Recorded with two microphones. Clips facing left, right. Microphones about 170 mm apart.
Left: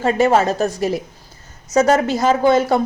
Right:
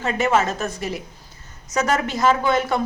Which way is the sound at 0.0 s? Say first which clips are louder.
Left 5 dB; 35° left (ahead or behind).